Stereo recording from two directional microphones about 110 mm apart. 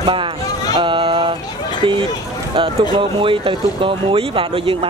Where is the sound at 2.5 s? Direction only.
50° right (ahead or behind).